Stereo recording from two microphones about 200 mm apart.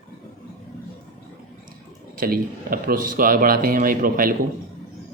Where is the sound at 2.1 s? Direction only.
45° right (ahead or behind).